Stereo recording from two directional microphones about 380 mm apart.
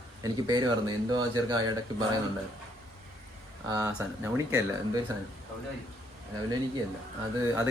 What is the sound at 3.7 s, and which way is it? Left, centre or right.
A man's voice, centre.